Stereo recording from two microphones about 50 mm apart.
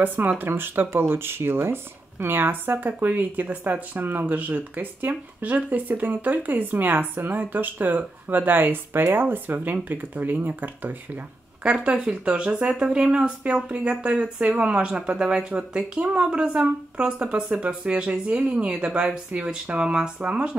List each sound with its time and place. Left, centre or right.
0.0 s speech: right
11.6 s speech: centre